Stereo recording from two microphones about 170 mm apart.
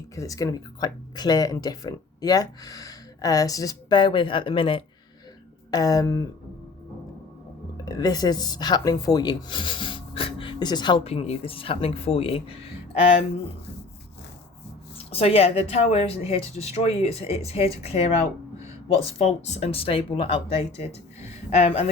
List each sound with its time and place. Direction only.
0.2 s speech: 20° left (ahead or behind)
7.9 s speech: 20° left (ahead or behind)
14.9 s speech: 35° left (ahead or behind)